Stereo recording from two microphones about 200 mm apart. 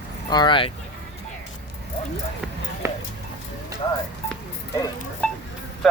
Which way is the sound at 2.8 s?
15° right (ahead or behind).